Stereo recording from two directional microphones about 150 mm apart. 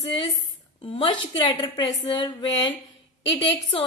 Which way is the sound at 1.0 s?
35° left (ahead or behind).